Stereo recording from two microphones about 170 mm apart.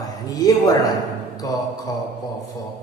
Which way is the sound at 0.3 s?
20° left (ahead or behind).